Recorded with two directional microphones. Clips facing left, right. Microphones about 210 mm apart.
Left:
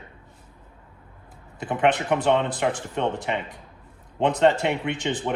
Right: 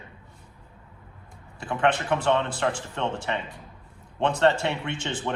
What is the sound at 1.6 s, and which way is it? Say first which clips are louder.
Speech: left 2 dB; 20° left (ahead or behind).